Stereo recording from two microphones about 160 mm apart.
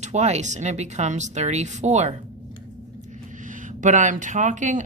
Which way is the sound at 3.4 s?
50° right (ahead or behind).